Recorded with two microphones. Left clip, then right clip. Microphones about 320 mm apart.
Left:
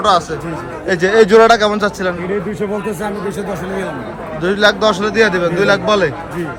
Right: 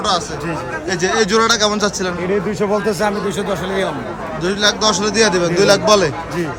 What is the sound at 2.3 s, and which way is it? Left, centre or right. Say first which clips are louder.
Speech: right 2 dB; centre.